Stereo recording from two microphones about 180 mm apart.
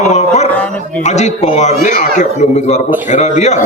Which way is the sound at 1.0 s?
40° left (ahead or behind).